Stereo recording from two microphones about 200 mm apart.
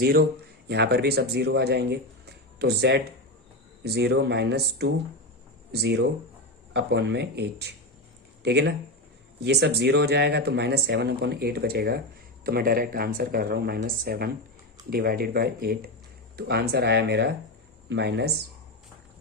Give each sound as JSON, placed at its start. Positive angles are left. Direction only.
{"t": 0.0, "sound": "speech", "side_deg": -50}